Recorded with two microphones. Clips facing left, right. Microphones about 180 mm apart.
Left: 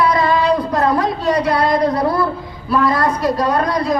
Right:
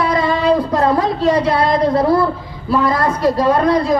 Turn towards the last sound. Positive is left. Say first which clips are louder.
# right 3 dB
turn(degrees=-25)  # may be behind; listen again after turning